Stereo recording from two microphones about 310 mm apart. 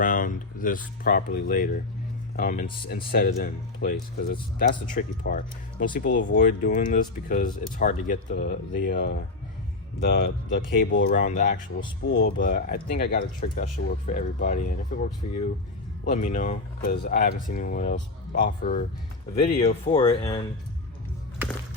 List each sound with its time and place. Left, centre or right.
0.0 s speech: left